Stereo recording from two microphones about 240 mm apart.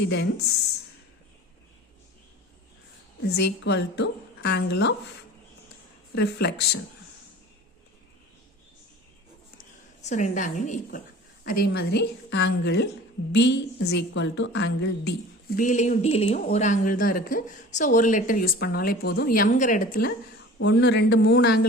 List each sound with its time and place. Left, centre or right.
0.1 s a woman's voice: left
3.2 s a woman's voice: left
6.1 s a woman's voice: left
10.0 s a woman's voice: left